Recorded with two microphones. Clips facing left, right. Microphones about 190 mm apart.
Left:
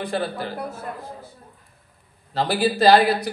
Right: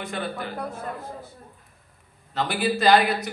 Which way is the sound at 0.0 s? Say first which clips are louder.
Left 5 dB; 35° left (ahead or behind).